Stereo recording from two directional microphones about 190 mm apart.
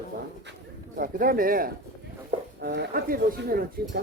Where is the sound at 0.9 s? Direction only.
50° right (ahead or behind).